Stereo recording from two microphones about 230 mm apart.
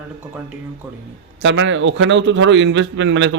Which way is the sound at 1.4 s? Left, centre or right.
Right.